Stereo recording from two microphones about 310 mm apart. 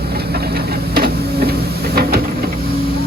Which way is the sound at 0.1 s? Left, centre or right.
Right.